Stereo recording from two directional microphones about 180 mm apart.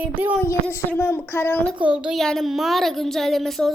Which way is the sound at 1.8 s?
5° right (ahead or behind).